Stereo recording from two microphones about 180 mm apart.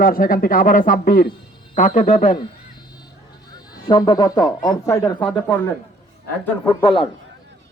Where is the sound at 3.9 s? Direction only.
25° left (ahead or behind).